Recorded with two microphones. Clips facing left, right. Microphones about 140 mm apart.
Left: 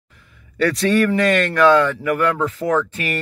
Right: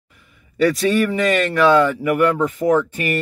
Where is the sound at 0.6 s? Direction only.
10° right (ahead or behind).